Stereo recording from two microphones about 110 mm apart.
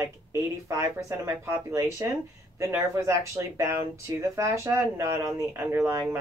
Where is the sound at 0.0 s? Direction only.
25° right (ahead or behind).